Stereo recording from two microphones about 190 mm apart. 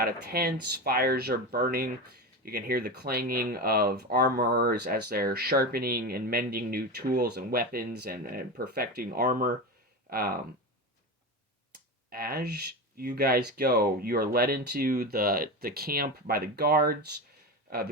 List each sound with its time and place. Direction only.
0.0 s speech: 55° right (ahead or behind)
12.1 s speech: 55° right (ahead or behind)